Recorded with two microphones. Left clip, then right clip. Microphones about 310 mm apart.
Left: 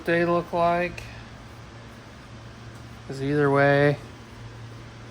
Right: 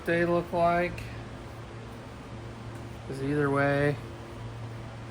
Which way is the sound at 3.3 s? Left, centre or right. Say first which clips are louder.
Left 7 dB; left.